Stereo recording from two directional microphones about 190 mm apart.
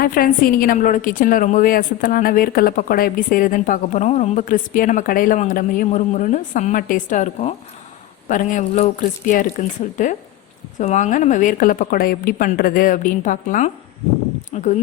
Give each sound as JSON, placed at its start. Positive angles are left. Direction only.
{"t": 0.0, "sound": "a woman's voice", "side_deg": 50}